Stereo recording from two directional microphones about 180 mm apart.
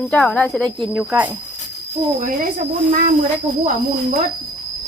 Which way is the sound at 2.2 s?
45° right (ahead or behind).